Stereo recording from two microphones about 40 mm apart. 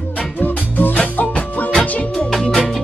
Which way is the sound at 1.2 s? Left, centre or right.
Left.